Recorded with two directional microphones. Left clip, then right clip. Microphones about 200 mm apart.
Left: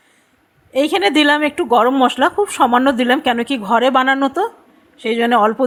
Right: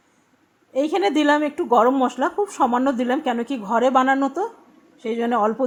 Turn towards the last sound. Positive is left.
turn(degrees=20)  # may be behind; listen again after turning